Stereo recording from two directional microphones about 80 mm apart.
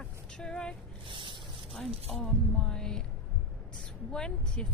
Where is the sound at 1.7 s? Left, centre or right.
Centre.